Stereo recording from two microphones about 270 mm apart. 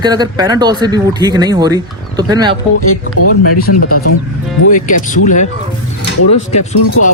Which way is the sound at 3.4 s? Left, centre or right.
Left.